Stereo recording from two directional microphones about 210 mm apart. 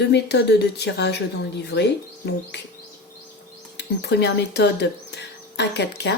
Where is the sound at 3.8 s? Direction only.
55° left (ahead or behind).